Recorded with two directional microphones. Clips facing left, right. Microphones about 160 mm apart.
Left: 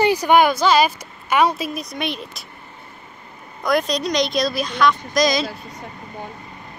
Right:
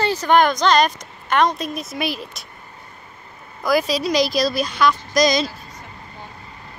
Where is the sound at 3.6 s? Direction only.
Centre (ahead or behind).